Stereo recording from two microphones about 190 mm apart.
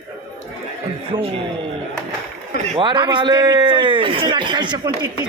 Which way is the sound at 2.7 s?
25° right (ahead or behind).